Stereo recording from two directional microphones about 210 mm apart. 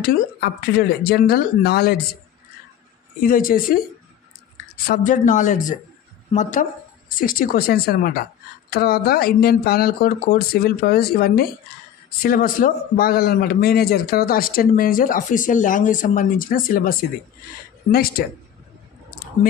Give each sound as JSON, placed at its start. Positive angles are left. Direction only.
{"t": 0.0, "sound": "a woman's voice", "side_deg": 45}
{"t": 3.2, "sound": "speech", "side_deg": 40}
{"t": 4.8, "sound": "a woman's voice", "side_deg": 40}
{"t": 17.9, "sound": "a woman's voice", "side_deg": 45}